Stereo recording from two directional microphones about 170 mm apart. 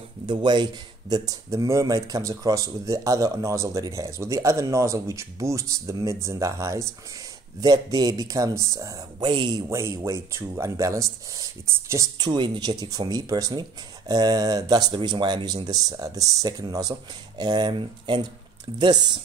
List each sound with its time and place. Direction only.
0.3 s speech: 25° right (ahead or behind)